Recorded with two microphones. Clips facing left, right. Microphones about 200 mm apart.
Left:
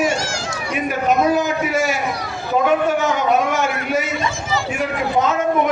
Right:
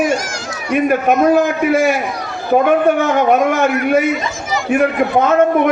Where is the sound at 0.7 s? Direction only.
55° right (ahead or behind).